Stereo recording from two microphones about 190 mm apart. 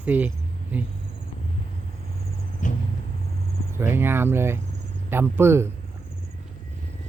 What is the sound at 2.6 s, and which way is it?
Vehicle, 40° left (ahead or behind).